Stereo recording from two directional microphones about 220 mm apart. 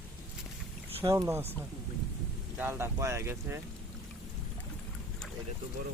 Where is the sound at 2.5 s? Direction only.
10° right (ahead or behind).